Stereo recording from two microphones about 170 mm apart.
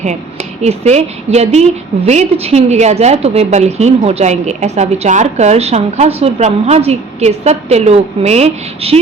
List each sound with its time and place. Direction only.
0.6 s a woman's voice: 40° right (ahead or behind)